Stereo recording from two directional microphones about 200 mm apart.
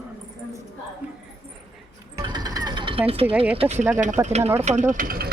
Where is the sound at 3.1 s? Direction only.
30° right (ahead or behind).